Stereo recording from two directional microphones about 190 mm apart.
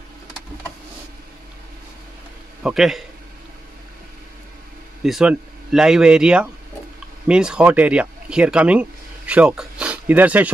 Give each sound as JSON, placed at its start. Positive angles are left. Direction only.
{"t": 2.6, "sound": "speech", "side_deg": 0}
{"t": 5.0, "sound": "speech", "side_deg": -5}